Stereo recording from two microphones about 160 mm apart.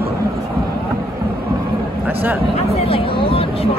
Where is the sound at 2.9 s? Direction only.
35° left (ahead or behind).